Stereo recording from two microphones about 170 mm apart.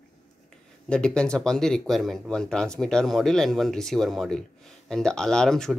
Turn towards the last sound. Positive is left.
turn(degrees=5)  # may be behind; listen again after turning